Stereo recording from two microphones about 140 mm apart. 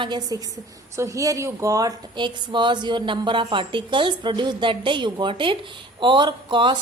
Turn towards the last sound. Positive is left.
turn(degrees=-35)  # may be behind; listen again after turning